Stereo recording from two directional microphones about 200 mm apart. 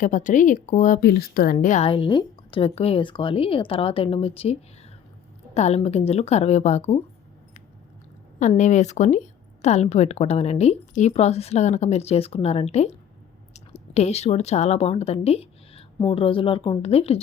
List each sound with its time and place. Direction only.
0.0 s speech: 40° left (ahead or behind)
1.0 s a woman's voice: 50° left (ahead or behind); by 4.5 s 30° left (ahead or behind)
5.5 s speech: 35° left (ahead or behind)
8.4 s speech: 35° left (ahead or behind)